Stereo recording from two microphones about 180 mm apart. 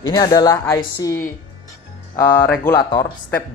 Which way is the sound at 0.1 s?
20° left (ahead or behind).